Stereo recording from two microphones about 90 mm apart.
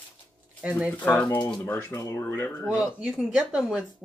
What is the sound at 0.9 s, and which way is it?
Speech, 15° left (ahead or behind).